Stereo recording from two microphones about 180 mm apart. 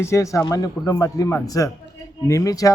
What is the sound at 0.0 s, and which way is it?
Speech, 15° left (ahead or behind).